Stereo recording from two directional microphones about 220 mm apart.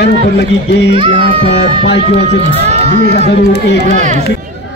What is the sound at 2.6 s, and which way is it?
Crowd, 30° right (ahead or behind).